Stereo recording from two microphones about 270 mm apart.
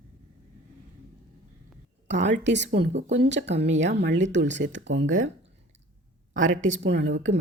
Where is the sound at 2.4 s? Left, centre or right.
Right.